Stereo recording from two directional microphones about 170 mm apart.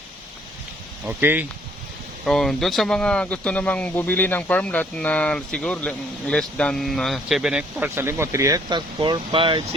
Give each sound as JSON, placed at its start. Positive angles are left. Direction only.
{"t": 1.0, "sound": "speech", "side_deg": -10}
{"t": 2.2, "sound": "speech", "side_deg": 0}